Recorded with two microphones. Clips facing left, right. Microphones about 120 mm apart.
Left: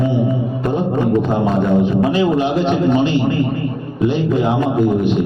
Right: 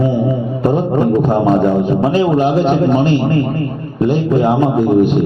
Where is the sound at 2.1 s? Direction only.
40° right (ahead or behind).